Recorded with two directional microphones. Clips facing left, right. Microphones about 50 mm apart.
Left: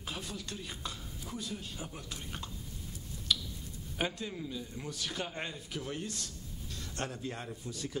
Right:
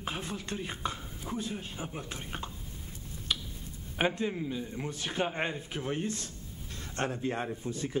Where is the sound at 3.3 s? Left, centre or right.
Right.